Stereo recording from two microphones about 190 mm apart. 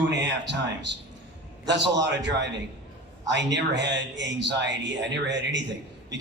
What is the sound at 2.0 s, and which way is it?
A man's voice, 70° right (ahead or behind).